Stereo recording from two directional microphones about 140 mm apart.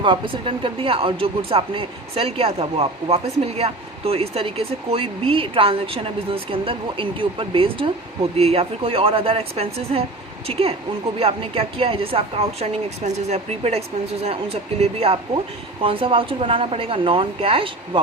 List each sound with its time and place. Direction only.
0.0 s a woman's voice: 35° right (ahead or behind)